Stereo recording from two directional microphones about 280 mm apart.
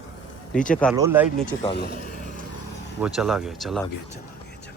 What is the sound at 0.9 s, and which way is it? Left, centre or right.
Speech, centre.